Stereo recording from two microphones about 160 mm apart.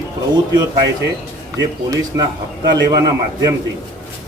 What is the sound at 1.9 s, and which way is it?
Speech, 20° right (ahead or behind).